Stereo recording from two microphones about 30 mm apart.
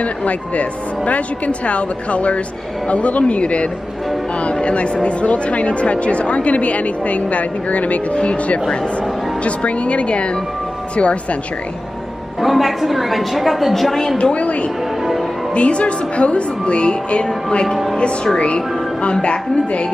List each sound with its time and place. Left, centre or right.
0.0 s speech: left
9.4 s speech: left
12.4 s a woman's voice: centre
14.3 s a woman's voice: left